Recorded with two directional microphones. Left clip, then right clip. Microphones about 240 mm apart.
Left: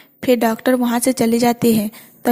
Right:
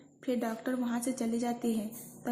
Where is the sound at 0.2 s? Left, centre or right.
Left.